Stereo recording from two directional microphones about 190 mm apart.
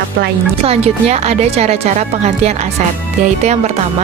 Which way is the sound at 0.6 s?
35° right (ahead or behind).